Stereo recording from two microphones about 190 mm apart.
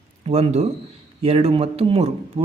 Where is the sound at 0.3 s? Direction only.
35° right (ahead or behind).